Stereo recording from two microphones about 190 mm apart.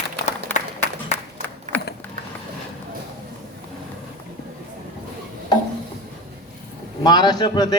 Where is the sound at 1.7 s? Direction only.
40° right (ahead or behind).